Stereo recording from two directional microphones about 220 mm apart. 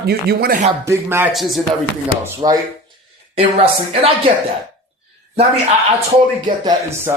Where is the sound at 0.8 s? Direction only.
10° right (ahead or behind).